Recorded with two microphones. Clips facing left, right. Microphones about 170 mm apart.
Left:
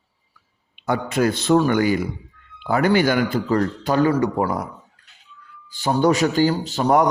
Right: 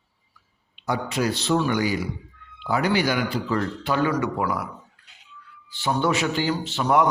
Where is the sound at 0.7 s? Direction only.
55° left (ahead or behind).